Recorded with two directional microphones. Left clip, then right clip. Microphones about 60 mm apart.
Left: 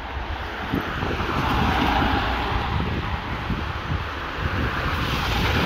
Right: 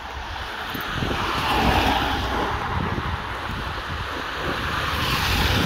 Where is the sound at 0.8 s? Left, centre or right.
Centre.